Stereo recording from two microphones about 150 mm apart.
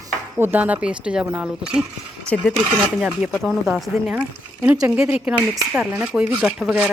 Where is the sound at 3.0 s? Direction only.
5° right (ahead or behind).